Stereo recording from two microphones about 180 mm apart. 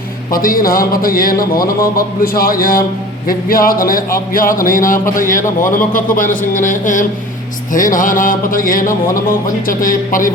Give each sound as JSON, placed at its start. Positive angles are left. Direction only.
{"t": 0.3, "sound": "speech", "side_deg": 50}